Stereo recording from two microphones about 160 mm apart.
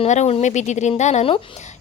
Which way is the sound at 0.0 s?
45° left (ahead or behind).